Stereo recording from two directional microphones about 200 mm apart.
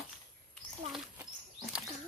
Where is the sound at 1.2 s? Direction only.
5° right (ahead or behind).